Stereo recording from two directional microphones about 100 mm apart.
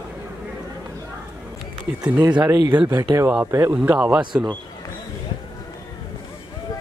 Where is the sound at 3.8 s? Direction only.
15° right (ahead or behind).